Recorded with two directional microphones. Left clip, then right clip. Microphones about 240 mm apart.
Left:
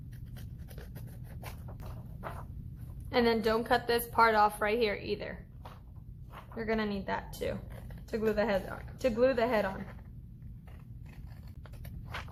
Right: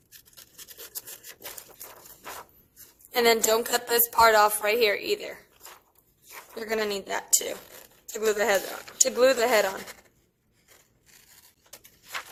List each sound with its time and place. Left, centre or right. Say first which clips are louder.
3.1 s a woman's voice: right 6 dB; right
6.5 s a woman's voice: right 5 dB; right